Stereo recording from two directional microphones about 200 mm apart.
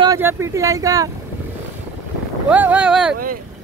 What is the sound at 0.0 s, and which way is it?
Speech, 15° right (ahead or behind).